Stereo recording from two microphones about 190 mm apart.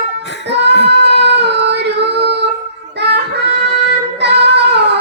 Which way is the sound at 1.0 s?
65° right (ahead or behind).